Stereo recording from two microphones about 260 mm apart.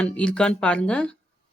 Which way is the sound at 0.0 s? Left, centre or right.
Centre.